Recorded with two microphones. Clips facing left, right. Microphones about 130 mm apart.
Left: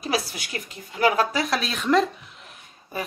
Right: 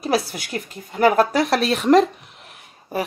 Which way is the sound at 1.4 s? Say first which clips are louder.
Right 7 dB; 65° right (ahead or behind).